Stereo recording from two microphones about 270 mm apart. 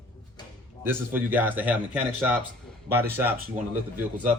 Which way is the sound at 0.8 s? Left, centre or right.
Centre.